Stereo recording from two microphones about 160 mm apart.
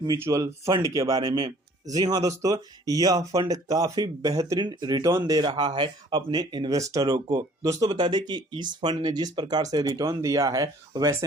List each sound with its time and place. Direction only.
0.0 s speech: 20° right (ahead or behind)